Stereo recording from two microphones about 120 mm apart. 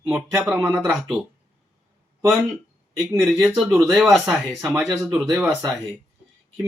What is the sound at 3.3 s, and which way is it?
Speech, 15° right (ahead or behind).